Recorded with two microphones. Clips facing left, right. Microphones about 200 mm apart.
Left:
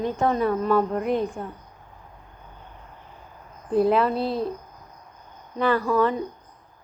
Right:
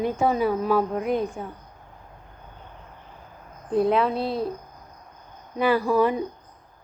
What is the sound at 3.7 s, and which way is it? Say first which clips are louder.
Speech: left 1 dB; centre (ahead or behind).